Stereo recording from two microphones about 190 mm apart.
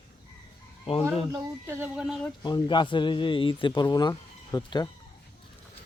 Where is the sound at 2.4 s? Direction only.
25° left (ahead or behind).